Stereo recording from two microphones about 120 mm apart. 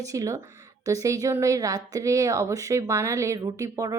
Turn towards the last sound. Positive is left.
turn(degrees=-25)  # may be behind; listen again after turning